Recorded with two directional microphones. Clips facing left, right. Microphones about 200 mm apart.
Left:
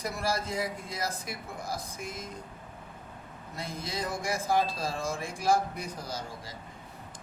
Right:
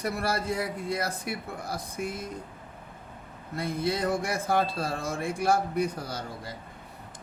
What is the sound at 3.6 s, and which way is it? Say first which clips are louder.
A man's voice: right 7 dB; 60° right (ahead or behind).